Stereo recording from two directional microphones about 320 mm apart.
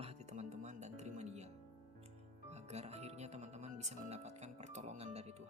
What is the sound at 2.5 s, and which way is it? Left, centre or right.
Speech, centre.